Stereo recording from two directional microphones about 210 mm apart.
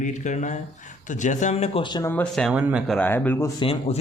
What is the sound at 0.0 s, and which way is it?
Speech, 35° left (ahead or behind).